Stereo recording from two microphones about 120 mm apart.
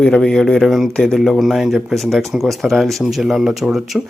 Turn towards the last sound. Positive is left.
turn(degrees=-5)  # may be behind; listen again after turning